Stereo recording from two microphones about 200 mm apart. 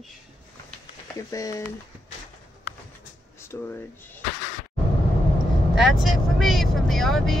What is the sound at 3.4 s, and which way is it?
Speech, 10° left (ahead or behind).